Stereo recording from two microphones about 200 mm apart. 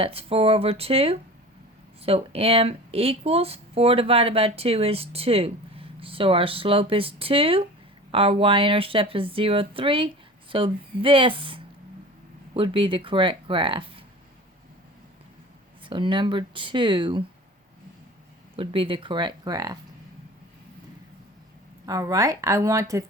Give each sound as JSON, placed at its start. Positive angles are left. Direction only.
{"t": 0.0, "sound": "speech", "side_deg": -30}
{"t": 15.8, "sound": "speech", "side_deg": -25}
{"t": 18.5, "sound": "speech", "side_deg": -25}
{"t": 21.8, "sound": "a woman's voice", "side_deg": -15}